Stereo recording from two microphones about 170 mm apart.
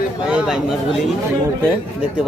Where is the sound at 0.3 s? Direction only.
5° right (ahead or behind).